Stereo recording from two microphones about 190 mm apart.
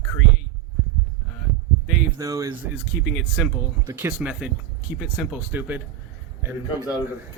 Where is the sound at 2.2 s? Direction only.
20° right (ahead or behind).